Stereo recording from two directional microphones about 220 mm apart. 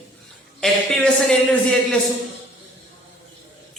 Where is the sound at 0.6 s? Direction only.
Centre (ahead or behind).